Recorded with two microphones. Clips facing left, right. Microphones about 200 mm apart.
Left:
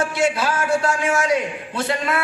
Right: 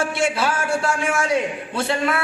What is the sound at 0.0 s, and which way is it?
A man's voice, 30° right (ahead or behind).